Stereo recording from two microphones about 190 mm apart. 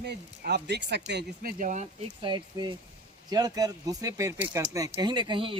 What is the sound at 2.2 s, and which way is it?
Speech, 25° right (ahead or behind).